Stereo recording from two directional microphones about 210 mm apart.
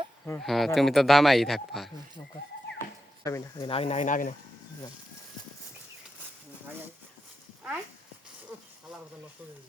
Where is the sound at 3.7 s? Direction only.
30° left (ahead or behind).